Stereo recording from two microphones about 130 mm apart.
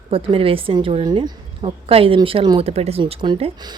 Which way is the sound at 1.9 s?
45° right (ahead or behind).